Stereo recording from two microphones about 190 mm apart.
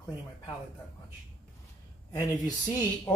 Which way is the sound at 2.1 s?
20° left (ahead or behind).